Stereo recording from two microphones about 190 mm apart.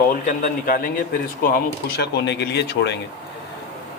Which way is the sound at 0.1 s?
45° left (ahead or behind).